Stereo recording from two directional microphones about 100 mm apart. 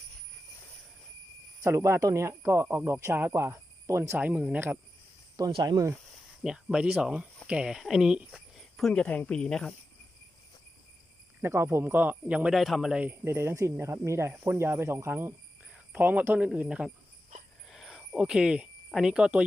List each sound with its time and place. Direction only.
1.6 s speech: 30° right (ahead or behind)
4.2 s speech: 15° right (ahead or behind)
5.6 s speech: 35° right (ahead or behind)
6.4 s speech: 10° right (ahead or behind)
11.4 s speech: 25° right (ahead or behind)
12.5 s speech: centre (ahead or behind)
13.1 s speech: 25° right (ahead or behind)
15.7 s speech: 15° right (ahead or behind)
17.7 s a sound: 5° right (ahead or behind)
18.9 s speech: 5° right (ahead or behind)